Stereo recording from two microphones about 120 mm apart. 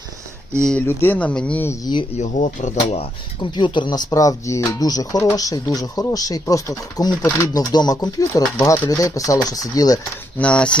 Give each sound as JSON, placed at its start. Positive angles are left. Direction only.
{"t": 0.8, "sound": "speech", "side_deg": 15}
{"t": 1.8, "sound": "speech", "side_deg": 40}
{"t": 2.1, "sound": "speech", "side_deg": 75}
{"t": 3.4, "sound": "speech", "side_deg": 40}
{"t": 8.5, "sound": "speech", "side_deg": 20}
{"t": 8.9, "sound": "speech", "side_deg": 30}
{"t": 10.3, "sound": "speech", "side_deg": 10}